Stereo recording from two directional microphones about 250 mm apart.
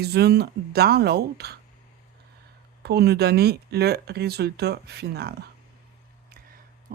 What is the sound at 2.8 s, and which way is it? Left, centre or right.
Speech, right.